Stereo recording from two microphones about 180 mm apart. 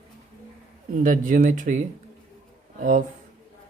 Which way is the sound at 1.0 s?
50° right (ahead or behind).